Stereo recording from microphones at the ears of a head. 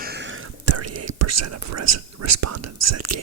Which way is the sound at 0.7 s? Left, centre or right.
Right.